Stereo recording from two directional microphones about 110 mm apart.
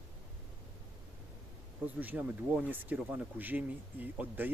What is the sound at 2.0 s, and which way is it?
Speech, 15° right (ahead or behind).